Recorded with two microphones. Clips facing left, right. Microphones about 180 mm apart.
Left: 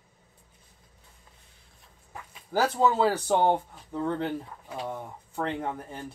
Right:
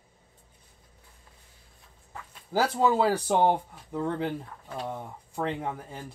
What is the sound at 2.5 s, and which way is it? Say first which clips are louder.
Speech: even; 10° right (ahead or behind).